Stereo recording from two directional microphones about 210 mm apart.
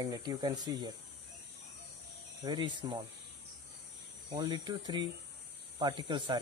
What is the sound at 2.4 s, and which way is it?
Speech, 20° right (ahead or behind).